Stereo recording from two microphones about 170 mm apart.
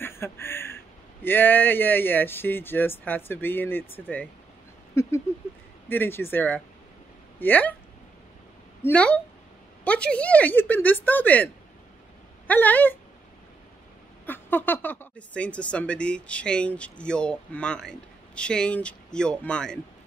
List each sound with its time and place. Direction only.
0.0 s speech: 15° left (ahead or behind)
8.8 s speech: 10° left (ahead or behind)
14.2 s speech: 10° left (ahead or behind)